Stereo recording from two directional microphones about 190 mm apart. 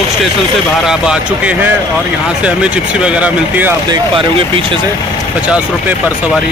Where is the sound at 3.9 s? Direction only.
25° right (ahead or behind).